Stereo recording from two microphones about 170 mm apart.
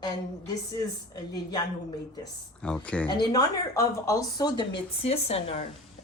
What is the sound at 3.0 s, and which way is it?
Speech, 25° left (ahead or behind).